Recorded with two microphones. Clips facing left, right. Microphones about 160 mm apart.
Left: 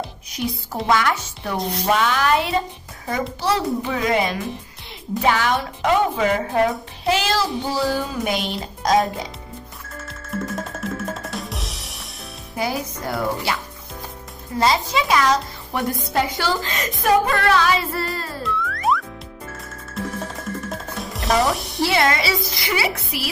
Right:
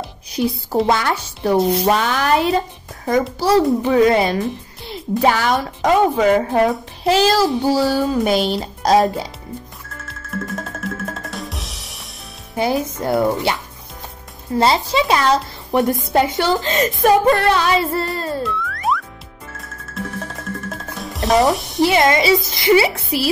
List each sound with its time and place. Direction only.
0.8 s a child's voice: 30° right (ahead or behind)
10.0 s drum: centre (ahead or behind)
12.5 s speech: 25° right (ahead or behind)
14.6 s speech: 30° right (ahead or behind)
18.4 s music: centre (ahead or behind)
21.8 s speech: 20° right (ahead or behind)